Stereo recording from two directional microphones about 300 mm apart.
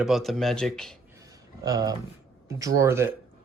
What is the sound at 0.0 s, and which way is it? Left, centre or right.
Speech, centre.